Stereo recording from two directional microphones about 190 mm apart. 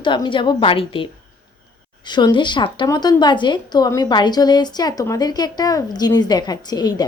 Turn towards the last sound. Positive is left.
turn(degrees=20)  # may be behind; listen again after turning